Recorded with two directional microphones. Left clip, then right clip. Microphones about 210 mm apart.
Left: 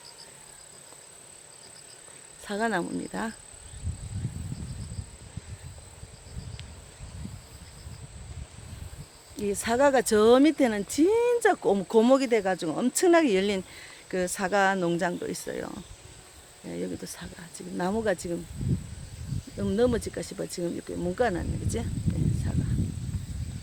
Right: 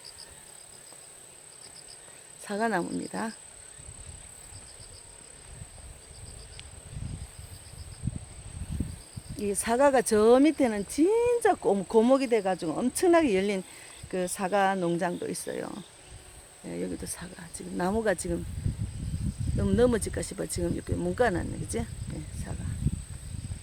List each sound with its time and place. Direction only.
2.4 s speech: 5° right (ahead or behind)
9.3 s speech: 5° right (ahead or behind)
19.5 s speech: 20° right (ahead or behind)